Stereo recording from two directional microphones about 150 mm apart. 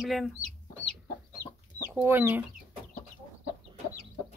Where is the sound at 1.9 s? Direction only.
15° right (ahead or behind).